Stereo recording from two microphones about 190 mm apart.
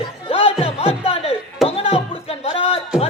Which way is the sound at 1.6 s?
30° left (ahead or behind).